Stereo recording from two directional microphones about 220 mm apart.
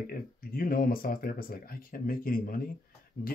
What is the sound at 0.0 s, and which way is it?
Speech, 40° left (ahead or behind).